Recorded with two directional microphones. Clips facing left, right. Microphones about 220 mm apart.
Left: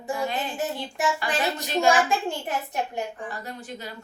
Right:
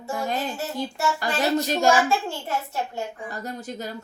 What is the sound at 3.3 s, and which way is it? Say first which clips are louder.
Speech: right 4 dB; 40° right (ahead or behind).